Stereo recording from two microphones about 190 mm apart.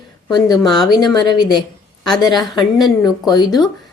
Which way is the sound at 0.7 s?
Centre (ahead or behind).